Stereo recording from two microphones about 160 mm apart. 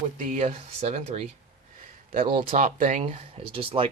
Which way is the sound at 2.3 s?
55° right (ahead or behind).